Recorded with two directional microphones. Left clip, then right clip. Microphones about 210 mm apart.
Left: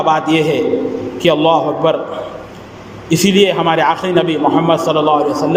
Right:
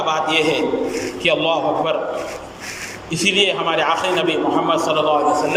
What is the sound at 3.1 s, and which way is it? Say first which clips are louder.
A man's voice: left 5 dB; 35° left (ahead or behind).